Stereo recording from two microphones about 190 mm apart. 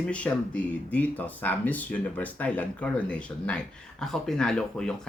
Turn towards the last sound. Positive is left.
turn(degrees=5)  # may be behind; listen again after turning